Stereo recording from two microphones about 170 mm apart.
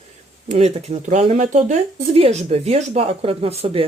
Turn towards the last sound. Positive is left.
turn(degrees=-35)  # may be behind; listen again after turning